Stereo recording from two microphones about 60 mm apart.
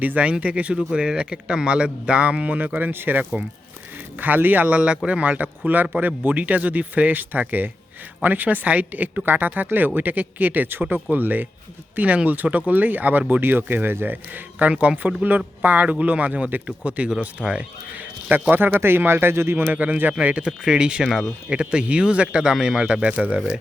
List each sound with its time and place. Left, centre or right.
0.0 s speech: right
20.1 s speech: centre